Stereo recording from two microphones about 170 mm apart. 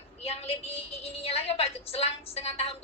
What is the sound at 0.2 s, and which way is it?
A woman's voice, 35° left (ahead or behind).